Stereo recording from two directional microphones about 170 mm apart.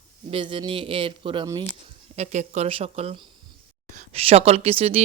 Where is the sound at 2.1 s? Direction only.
40° right (ahead or behind).